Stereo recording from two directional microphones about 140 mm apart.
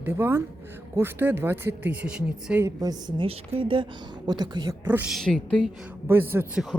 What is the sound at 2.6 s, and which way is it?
A woman's voice, 25° right (ahead or behind).